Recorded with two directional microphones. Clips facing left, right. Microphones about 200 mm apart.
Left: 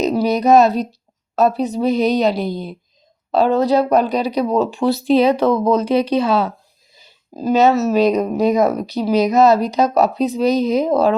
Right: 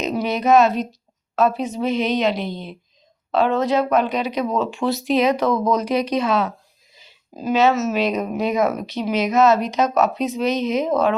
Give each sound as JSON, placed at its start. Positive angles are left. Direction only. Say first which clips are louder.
{"t": 0.0, "sound": "speech", "louder": "left 5 dB", "side_deg": 35}